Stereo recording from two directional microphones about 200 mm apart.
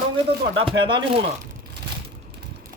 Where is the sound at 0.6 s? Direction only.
25° right (ahead or behind).